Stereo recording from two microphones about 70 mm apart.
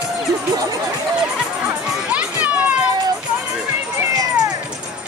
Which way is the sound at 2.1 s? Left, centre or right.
Right.